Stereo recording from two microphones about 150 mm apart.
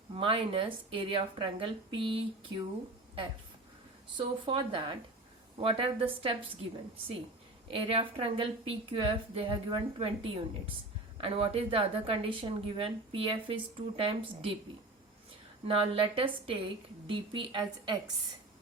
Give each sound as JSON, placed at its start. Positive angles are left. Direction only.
{"t": 0.1, "sound": "a woman's voice", "side_deg": -35}
{"t": 4.2, "sound": "a woman's voice", "side_deg": -35}
{"t": 7.7, "sound": "a woman's voice", "side_deg": -40}
{"t": 11.2, "sound": "a woman's voice", "side_deg": -40}
{"t": 15.6, "sound": "a woman's voice", "side_deg": -40}